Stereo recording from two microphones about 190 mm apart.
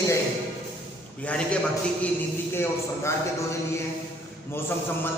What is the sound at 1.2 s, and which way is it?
Speech, 5° left (ahead or behind).